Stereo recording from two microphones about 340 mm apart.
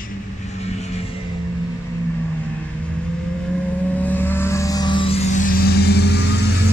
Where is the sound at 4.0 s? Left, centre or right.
Centre; by 6.4 s left.